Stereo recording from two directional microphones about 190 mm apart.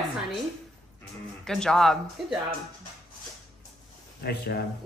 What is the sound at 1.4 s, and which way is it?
Speech, 5° left (ahead or behind).